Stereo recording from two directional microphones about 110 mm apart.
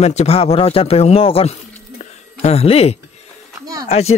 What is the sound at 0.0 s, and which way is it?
Speech, 80° left.